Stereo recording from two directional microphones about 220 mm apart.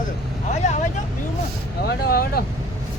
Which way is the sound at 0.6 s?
30° left (ahead or behind).